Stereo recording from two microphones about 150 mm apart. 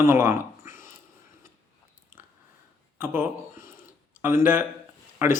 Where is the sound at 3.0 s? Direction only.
15° right (ahead or behind).